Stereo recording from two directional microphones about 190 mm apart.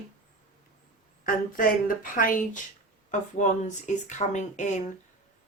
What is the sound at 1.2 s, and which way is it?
Speech, 45° left (ahead or behind).